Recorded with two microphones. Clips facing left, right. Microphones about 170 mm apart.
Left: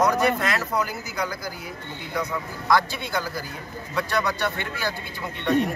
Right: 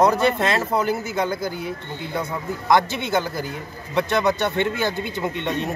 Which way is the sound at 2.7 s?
20° right (ahead or behind).